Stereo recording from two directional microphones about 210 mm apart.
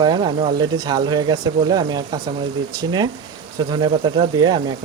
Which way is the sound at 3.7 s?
20° right (ahead or behind).